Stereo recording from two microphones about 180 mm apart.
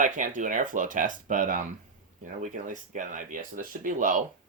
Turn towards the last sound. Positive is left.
turn(degrees=-45)  # may be behind; listen again after turning